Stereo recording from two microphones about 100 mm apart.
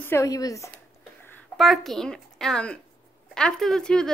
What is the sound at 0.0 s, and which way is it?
Speech, 25° left (ahead or behind).